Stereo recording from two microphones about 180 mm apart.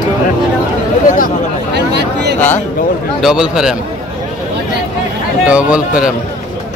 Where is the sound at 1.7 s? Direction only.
70° right (ahead or behind).